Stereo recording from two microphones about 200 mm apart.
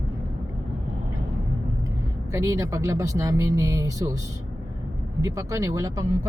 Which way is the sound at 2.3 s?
15° right (ahead or behind).